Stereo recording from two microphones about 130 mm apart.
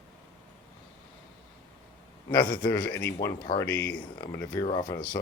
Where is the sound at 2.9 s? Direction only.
20° left (ahead or behind).